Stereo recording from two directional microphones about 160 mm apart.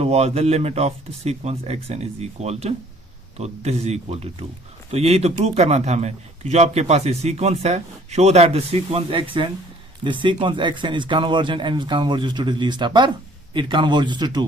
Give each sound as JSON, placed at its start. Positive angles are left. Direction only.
{"t": 0.0, "sound": "a man's voice", "side_deg": -40}